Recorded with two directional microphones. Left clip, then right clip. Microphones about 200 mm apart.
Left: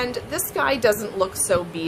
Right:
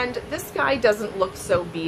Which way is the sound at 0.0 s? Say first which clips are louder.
Left 1 dB; 20° left (ahead or behind).